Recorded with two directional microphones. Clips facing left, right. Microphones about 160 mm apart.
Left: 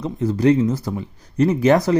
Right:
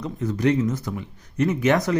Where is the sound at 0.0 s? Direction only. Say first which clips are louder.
Left 5 dB; 30° left (ahead or behind).